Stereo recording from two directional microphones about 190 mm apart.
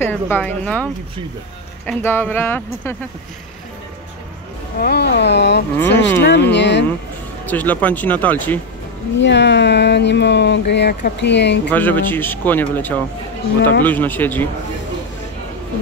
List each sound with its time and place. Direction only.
0.0 s speech: 10° left (ahead or behind)
1.9 s speech: 10° left (ahead or behind)
4.7 s speech: 55° left (ahead or behind)
5.8 s speech: 10° left (ahead or behind)
6.2 s speech: 65° left (ahead or behind)
7.4 s speech: 10° left (ahead or behind)
9.2 s speech: 65° left (ahead or behind)
11.7 s speech: 10° left (ahead or behind)